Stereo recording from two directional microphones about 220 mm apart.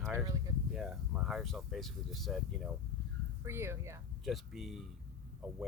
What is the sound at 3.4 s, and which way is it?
Speech, 10° right (ahead or behind).